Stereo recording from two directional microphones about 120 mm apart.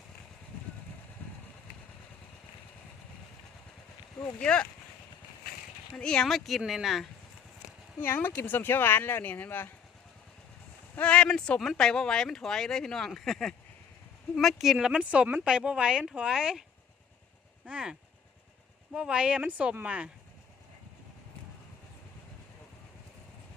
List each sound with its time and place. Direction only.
4.4 s speech: 10° left (ahead or behind)
5.9 s speech: 5° left (ahead or behind)
7.9 s speech: 20° left (ahead or behind)
10.9 s speech: 10° left (ahead or behind); by 16.6 s 5° right (ahead or behind)
17.7 s speech: 5° right (ahead or behind)
18.9 s speech: 10° right (ahead or behind)